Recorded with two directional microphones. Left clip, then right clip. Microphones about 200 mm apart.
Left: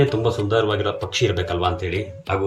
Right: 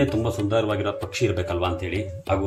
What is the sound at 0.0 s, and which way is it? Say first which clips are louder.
Speech: left 4 dB; 40° right (ahead or behind).